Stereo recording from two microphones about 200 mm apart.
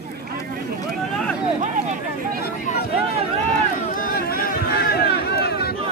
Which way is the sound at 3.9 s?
45° left (ahead or behind).